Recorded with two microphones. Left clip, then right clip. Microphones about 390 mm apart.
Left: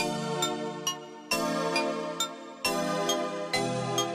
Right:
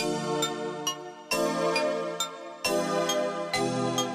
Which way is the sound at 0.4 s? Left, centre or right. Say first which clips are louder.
Right 1 dB; centre.